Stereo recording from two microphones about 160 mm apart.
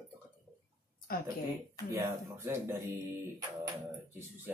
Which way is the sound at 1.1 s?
70° left (ahead or behind).